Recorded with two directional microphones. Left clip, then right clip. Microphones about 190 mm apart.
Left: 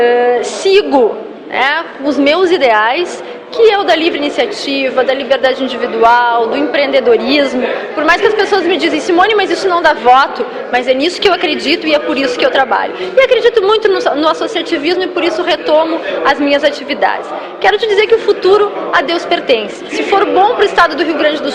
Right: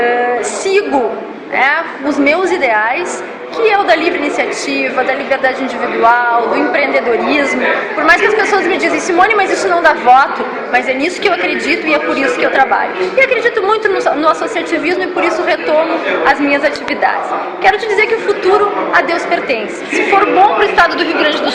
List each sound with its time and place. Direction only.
0.0 s a sound: 50° left (ahead or behind)
1.5 s a woman's voice: 45° left (ahead or behind)
6.7 s a woman's voice: 45° left (ahead or behind)